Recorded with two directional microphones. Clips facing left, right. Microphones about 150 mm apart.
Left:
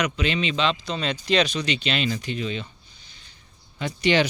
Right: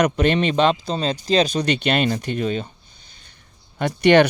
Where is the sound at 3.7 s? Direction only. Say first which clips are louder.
Right 7 dB; 60° right (ahead or behind).